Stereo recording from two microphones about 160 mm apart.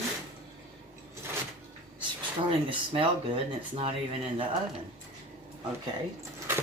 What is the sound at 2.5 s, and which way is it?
Speech, 35° right (ahead or behind).